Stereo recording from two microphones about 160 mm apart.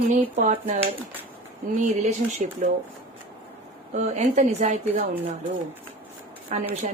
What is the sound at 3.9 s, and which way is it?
Speech, 45° right (ahead or behind).